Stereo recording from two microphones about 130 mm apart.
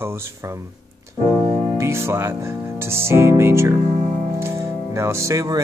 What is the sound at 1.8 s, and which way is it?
Speech, 20° right (ahead or behind).